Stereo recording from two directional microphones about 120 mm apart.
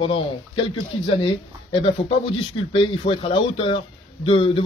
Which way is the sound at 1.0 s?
45° left (ahead or behind).